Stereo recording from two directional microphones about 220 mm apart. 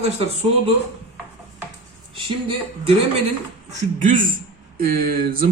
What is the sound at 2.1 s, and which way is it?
Speech, 25° right (ahead or behind).